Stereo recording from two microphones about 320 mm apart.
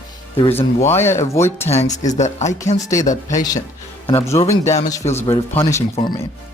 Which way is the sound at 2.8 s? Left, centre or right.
Centre.